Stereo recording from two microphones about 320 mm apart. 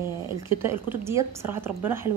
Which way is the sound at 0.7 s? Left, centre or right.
Centre.